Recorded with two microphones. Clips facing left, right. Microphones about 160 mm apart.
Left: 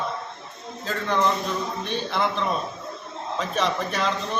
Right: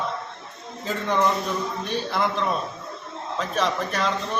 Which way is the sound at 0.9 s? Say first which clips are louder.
Right 1 dB; 15° right (ahead or behind).